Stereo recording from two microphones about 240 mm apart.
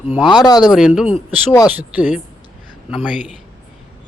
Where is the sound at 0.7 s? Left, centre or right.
Centre.